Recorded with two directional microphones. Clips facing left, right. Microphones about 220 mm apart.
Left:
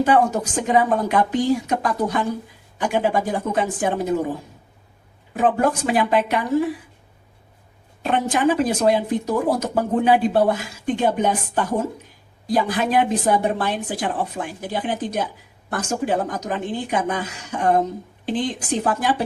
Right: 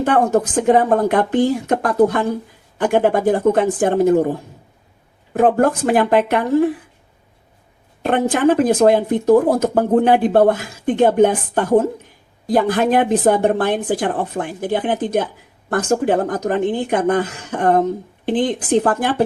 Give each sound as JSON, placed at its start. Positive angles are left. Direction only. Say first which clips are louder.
{"t": 0.0, "sound": "speech", "louder": "right 3 dB", "side_deg": -55}
{"t": 5.3, "sound": "speech", "louder": "right 5 dB", "side_deg": -55}
{"t": 8.0, "sound": "speech", "louder": "right 4 dB", "side_deg": -55}